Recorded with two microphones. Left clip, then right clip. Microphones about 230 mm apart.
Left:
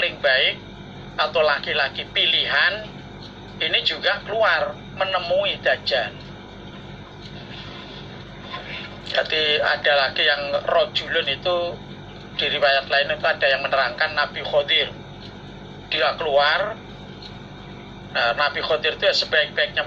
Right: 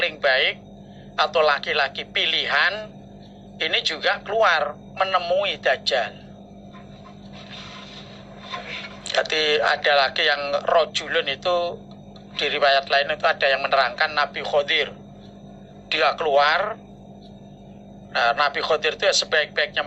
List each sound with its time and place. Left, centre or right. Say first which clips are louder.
0.0 s air conditioning: left 1 dB; right
1.2 s speech: even; right
9.1 s speech: even; right
16.0 s speech: even; right
18.2 s speech: right 1 dB; right